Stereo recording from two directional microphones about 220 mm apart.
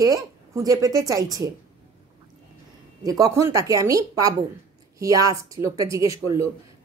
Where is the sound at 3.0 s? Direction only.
15° right (ahead or behind).